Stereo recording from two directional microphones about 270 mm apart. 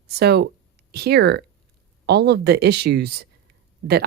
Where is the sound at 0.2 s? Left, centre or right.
Right.